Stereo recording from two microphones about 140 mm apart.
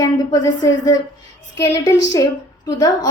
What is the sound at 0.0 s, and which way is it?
A woman's voice, 25° left (ahead or behind).